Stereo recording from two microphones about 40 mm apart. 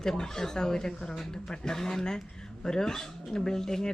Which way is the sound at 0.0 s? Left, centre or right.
Centre.